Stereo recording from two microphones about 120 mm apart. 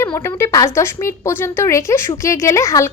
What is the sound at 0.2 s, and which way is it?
A woman's voice, 25° left (ahead or behind).